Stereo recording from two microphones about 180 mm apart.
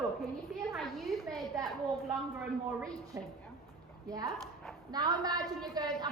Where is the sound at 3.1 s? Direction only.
15° right (ahead or behind).